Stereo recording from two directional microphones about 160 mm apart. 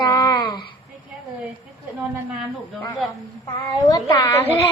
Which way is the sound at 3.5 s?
20° left (ahead or behind).